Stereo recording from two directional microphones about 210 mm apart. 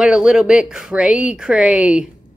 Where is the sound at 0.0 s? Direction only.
5° right (ahead or behind).